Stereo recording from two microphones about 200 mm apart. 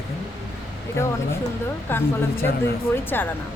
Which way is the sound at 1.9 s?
10° left (ahead or behind).